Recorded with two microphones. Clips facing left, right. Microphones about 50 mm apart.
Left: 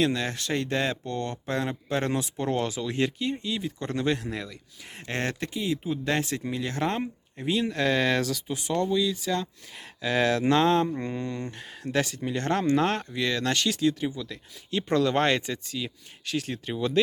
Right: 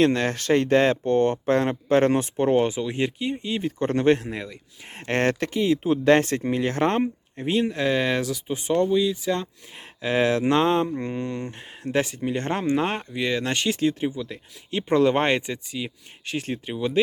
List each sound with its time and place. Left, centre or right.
0.0 s speech: right
2.4 s speech: right
3.5 s speech: right
7.8 s speech: centre
8.4 s speech: right
16.7 s speech: centre